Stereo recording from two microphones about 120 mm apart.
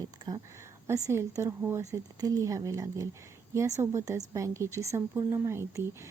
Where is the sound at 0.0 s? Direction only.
35° right (ahead or behind).